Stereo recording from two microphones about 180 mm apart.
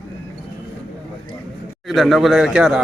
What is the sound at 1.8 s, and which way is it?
Speech, centre (ahead or behind).